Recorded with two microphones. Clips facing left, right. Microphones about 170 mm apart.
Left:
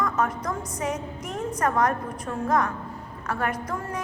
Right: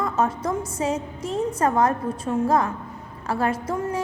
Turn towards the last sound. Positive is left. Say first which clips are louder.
# right 5 dB
turn(degrees=-25)  # may be behind; listen again after turning